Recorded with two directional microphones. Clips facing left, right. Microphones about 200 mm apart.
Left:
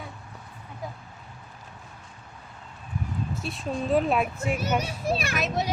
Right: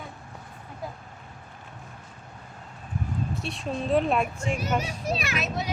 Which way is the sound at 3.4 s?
Centre (ahead or behind).